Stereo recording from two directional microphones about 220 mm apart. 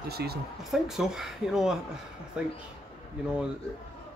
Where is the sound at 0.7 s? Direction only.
Centre (ahead or behind).